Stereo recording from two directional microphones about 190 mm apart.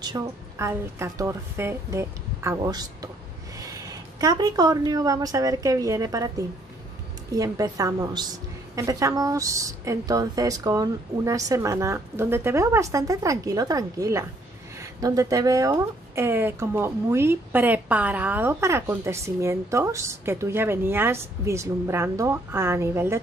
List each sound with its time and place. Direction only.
0.0 s a woman's voice: 20° right (ahead or behind)